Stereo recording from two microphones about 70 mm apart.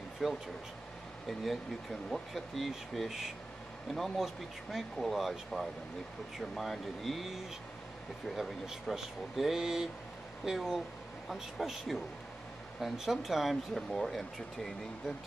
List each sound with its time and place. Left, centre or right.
0.2 s speech: centre